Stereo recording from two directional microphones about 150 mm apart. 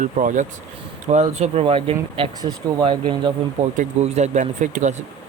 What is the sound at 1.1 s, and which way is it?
Speech, 45° right (ahead or behind).